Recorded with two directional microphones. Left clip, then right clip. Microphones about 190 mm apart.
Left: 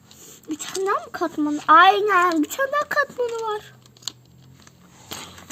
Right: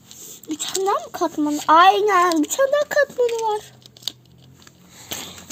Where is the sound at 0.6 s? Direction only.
25° left (ahead or behind).